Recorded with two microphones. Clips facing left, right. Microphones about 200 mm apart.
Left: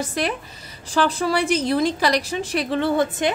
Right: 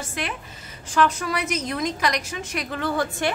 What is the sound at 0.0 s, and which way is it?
A woman's voice, 35° left (ahead or behind).